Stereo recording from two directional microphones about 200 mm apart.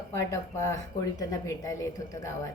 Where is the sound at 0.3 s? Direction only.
15° left (ahead or behind).